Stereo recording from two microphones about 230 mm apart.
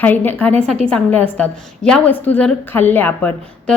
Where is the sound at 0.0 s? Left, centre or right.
Centre.